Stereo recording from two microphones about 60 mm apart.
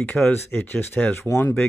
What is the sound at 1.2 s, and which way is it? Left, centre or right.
Speech, left.